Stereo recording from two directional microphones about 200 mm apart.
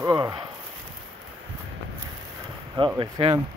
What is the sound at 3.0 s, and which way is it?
Speech, 25° right (ahead or behind).